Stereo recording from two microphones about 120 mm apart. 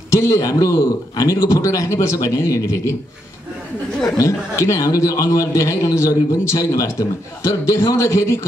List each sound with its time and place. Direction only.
0.1 s speech: 25° left (ahead or behind)
4.0 s speech: 25° left (ahead or behind)